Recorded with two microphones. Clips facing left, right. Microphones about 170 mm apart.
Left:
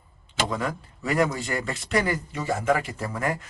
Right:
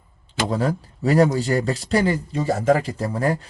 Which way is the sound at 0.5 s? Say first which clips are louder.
Right 6 dB; 35° right (ahead or behind).